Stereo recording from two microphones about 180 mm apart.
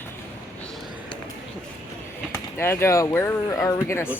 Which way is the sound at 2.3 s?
15° left (ahead or behind).